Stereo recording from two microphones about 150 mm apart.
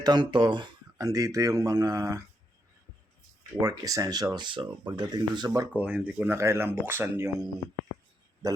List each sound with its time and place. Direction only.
0.0 s speech: 30° right (ahead or behind)
3.6 s speech: 25° right (ahead or behind)
5.7 s speech: 10° right (ahead or behind)
8.4 s speech: 25° right (ahead or behind)